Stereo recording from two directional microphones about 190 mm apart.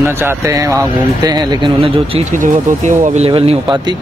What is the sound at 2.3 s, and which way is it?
Speech, 45° right (ahead or behind).